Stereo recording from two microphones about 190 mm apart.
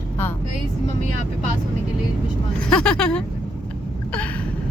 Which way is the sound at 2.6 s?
5° left (ahead or behind).